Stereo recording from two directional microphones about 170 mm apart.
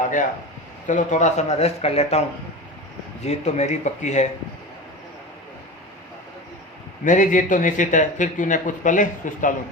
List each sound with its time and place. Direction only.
0.9 s speech: 45° left (ahead or behind)
3.2 s speech: 40° left (ahead or behind)
7.0 s speech: 50° left (ahead or behind)